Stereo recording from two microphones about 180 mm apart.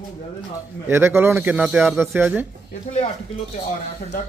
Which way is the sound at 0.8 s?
15° right (ahead or behind).